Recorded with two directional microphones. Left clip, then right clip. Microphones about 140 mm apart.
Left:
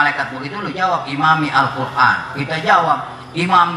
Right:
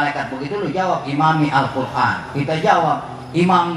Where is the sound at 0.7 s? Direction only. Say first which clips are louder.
Left 2 dB; 15° right (ahead or behind).